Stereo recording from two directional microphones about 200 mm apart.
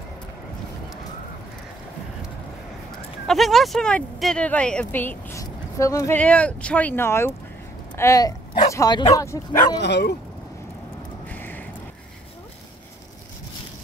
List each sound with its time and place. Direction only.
3.3 s speech: centre (ahead or behind)
9.8 s speech: 55° left (ahead or behind)
11.2 s a sound: 10° left (ahead or behind)